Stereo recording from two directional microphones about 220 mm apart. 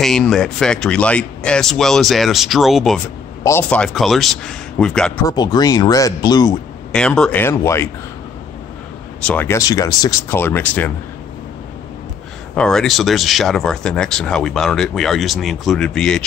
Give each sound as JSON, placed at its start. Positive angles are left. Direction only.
{"t": 0.0, "sound": "speech", "side_deg": 0}
{"t": 5.2, "sound": "speech", "side_deg": 20}
{"t": 6.9, "sound": "speech", "side_deg": 5}
{"t": 9.2, "sound": "speech", "side_deg": 5}
{"t": 12.5, "sound": "speech", "side_deg": 5}